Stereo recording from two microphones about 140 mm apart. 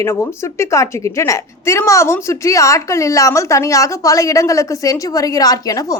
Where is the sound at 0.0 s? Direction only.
20° left (ahead or behind).